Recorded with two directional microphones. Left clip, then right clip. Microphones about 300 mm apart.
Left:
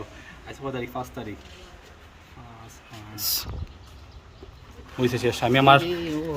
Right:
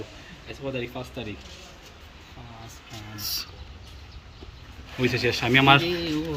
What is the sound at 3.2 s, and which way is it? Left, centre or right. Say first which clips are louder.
Speech: left 3 dB; left.